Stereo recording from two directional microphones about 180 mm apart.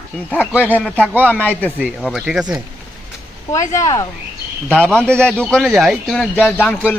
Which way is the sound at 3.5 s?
15° left (ahead or behind).